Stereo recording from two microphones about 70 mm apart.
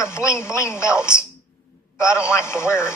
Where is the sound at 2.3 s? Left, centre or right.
Left.